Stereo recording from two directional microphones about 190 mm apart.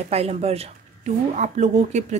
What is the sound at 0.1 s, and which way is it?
A woman's voice, 30° right (ahead or behind).